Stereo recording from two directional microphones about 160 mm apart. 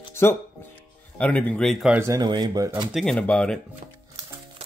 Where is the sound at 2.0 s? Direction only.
20° right (ahead or behind).